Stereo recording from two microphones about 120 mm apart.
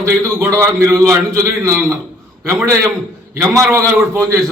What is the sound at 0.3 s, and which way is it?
A man's voice, 20° right (ahead or behind).